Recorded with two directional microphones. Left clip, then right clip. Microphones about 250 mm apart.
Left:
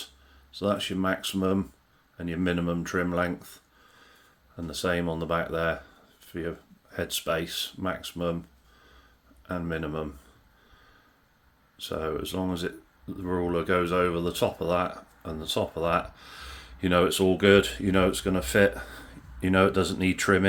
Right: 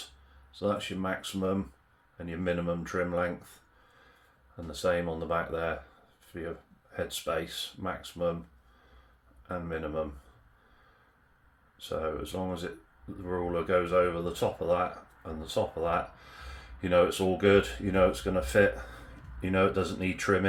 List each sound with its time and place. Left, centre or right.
0.6 s speech: left
4.7 s speech: left
9.5 s speech: left
11.8 s speech: left